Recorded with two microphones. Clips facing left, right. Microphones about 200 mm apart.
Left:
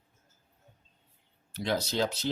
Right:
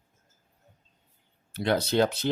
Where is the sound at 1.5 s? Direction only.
60° right (ahead or behind).